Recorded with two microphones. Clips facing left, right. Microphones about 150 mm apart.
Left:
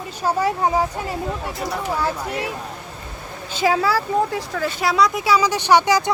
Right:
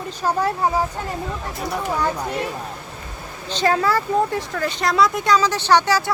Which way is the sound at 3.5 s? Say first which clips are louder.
Even; 5° left (ahead or behind).